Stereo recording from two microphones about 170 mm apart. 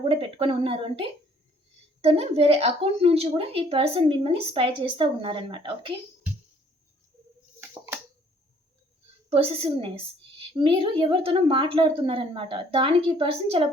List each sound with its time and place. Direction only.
0.0 s speech: 30° right (ahead or behind)
7.6 s a sound: 15° right (ahead or behind)
9.3 s speech: 35° right (ahead or behind)